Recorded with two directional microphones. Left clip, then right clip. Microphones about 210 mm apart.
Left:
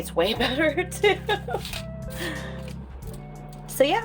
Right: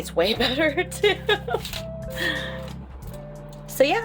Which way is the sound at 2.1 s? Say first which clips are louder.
Right 7 dB; 15° right (ahead or behind).